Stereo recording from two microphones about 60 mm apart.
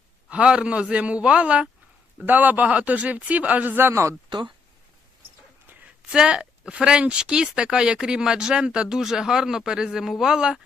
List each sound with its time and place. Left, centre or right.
0.3 s speech: centre
2.2 s speech: right
6.1 s a woman's voice: centre